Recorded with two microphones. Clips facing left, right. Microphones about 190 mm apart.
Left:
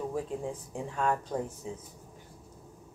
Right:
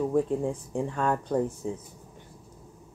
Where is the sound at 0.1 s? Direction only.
55° right (ahead or behind).